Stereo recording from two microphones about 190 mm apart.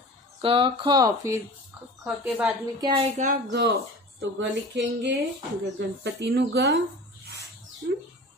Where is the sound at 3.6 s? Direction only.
65° right (ahead or behind).